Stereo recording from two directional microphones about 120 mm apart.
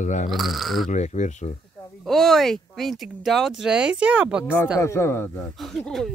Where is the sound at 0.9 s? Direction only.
70° left (ahead or behind).